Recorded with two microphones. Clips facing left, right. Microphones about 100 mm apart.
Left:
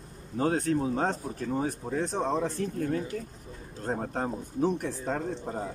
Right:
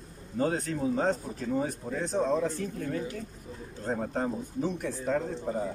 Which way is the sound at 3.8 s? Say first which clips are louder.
Even; 45° left (ahead or behind).